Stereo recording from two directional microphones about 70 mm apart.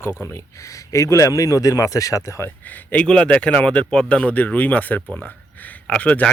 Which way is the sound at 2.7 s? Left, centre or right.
Left.